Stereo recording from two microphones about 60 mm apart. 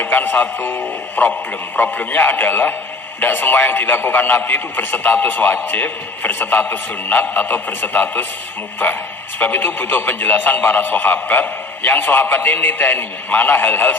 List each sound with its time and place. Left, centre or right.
0.0 s a man's voice: left
9.4 s a man's voice: left